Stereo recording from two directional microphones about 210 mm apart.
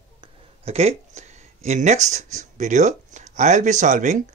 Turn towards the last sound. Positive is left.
turn(degrees=-35)  # may be behind; listen again after turning